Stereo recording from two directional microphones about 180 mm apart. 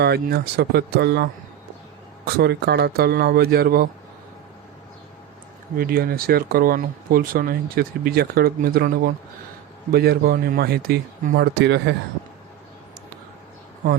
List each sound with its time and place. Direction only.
0.0 s speech: 65° right (ahead or behind)
5.7 s speech: 55° right (ahead or behind)